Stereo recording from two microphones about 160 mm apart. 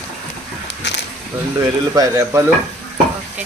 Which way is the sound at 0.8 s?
90° left.